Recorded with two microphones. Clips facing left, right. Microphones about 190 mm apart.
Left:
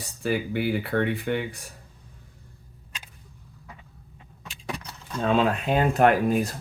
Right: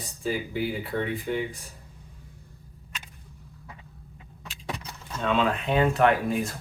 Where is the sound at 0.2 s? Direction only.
70° left (ahead or behind).